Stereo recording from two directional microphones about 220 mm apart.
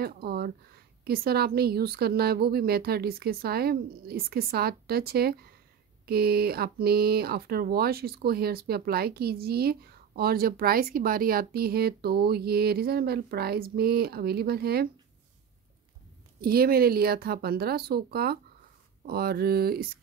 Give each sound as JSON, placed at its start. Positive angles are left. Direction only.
{"t": 0.0, "sound": "speech", "side_deg": -45}
{"t": 16.3, "sound": "speech", "side_deg": -45}